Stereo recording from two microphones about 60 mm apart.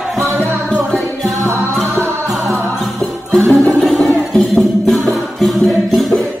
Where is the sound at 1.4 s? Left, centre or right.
Right.